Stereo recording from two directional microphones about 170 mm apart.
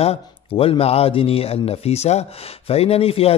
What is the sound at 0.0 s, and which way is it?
Speech, 35° left (ahead or behind).